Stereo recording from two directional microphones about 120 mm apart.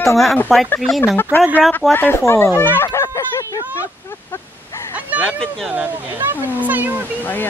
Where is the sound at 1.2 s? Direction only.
15° left (ahead or behind).